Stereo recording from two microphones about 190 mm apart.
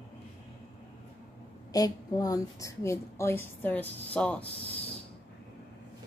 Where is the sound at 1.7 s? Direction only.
20° left (ahead or behind).